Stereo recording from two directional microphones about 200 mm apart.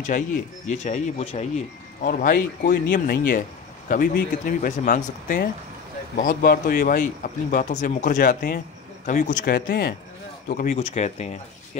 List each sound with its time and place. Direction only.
0.1 s speech: 40° left (ahead or behind)
2.0 s speech: 45° left (ahead or behind)